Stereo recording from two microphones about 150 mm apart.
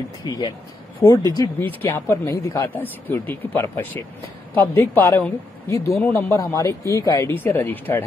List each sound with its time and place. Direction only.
0.2 s speech: 25° left (ahead or behind)
1.0 s speech: 10° left (ahead or behind)